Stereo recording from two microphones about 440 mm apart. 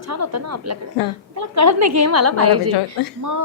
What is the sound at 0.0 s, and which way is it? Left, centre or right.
A woman's voice, right.